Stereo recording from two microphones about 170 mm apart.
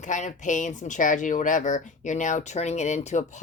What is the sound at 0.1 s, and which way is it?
Speech, 45° left (ahead or behind).